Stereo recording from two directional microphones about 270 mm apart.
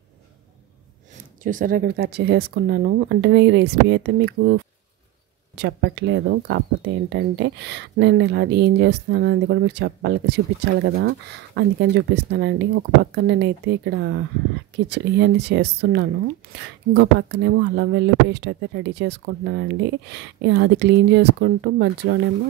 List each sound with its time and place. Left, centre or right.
1.4 s speech: right
5.6 s speech: right